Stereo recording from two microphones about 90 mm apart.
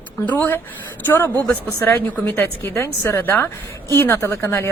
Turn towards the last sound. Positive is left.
turn(degrees=30)  # may be behind; listen again after turning